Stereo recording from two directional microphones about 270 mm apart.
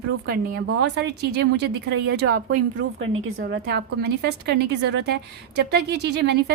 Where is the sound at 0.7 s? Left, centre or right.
Right.